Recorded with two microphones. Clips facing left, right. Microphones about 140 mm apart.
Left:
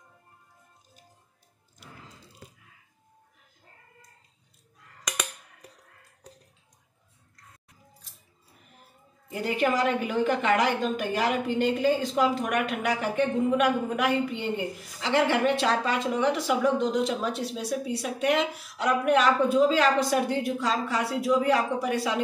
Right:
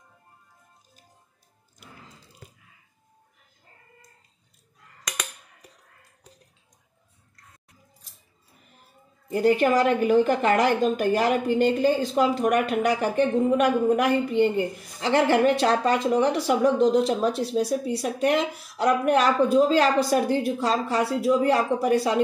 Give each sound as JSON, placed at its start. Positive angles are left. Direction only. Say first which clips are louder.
{"t": 9.3, "sound": "a woman's voice", "louder": "right 6 dB", "side_deg": -40}